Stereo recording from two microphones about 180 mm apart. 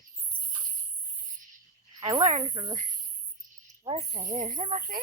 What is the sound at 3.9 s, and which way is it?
Speech, 40° right (ahead or behind).